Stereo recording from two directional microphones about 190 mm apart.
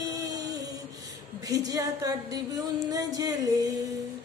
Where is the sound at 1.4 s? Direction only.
20° right (ahead or behind).